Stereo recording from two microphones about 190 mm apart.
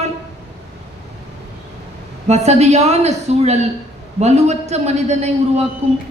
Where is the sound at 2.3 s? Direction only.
35° right (ahead or behind).